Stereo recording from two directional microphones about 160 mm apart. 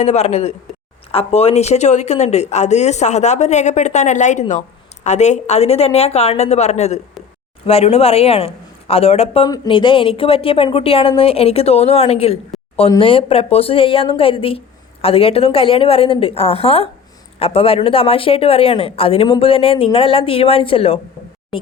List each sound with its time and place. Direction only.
0.0 s speech: 40° left (ahead or behind)